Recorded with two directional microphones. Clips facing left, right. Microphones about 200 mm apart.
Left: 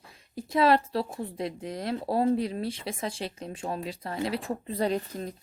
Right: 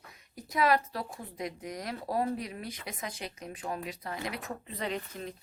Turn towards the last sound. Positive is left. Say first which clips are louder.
# left 7 dB
turn(degrees=35)  # may be behind; listen again after turning